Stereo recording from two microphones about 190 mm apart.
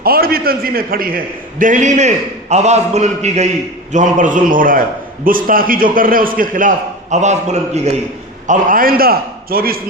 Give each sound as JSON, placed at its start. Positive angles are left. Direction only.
{"t": 0.0, "sound": "a man's voice", "side_deg": -50}